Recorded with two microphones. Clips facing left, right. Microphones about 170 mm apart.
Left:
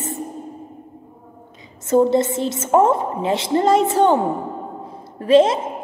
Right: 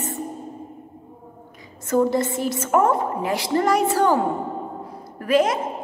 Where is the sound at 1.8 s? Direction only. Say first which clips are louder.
Left 4 dB; 25° left (ahead or behind).